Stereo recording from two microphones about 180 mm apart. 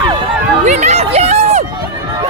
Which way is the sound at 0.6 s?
40° right (ahead or behind).